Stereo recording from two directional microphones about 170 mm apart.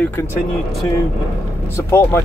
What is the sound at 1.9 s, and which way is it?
Speech, 15° left (ahead or behind).